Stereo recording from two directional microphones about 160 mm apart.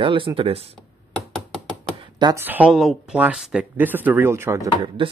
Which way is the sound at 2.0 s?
25° right (ahead or behind).